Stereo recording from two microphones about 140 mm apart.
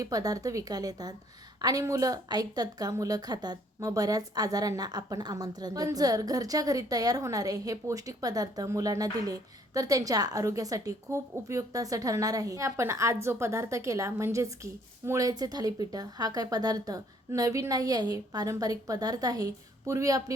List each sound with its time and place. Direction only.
0.0 s a woman's voice: 25° right (ahead or behind)